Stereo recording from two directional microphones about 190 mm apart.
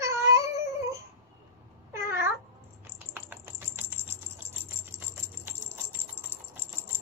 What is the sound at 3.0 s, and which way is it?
Bird flight, 10° right (ahead or behind).